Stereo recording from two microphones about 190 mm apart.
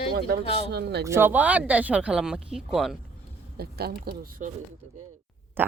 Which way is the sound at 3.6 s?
55° right (ahead or behind).